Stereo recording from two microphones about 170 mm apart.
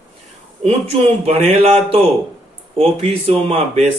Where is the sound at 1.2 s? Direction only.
35° right (ahead or behind).